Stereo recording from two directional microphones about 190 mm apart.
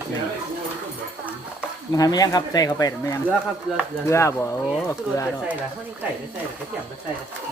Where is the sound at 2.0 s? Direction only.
20° left (ahead or behind).